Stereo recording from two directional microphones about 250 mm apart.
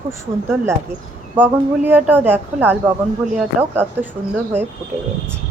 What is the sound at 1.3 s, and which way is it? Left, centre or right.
Speech, centre.